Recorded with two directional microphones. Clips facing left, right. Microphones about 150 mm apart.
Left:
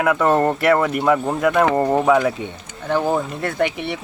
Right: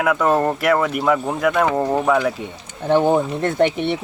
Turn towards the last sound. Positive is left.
turn(degrees=0)  # may be behind; listen again after turning